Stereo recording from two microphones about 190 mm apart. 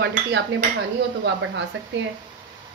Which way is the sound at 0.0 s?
65° right (ahead or behind).